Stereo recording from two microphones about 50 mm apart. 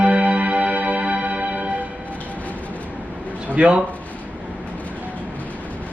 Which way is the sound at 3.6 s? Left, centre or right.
Right.